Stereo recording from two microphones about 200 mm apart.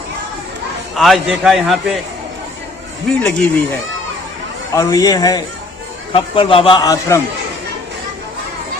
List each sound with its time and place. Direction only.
0.9 s a man's voice: centre (ahead or behind)
3.2 s a man's voice: 5° left (ahead or behind)
4.7 s a man's voice: 15° left (ahead or behind)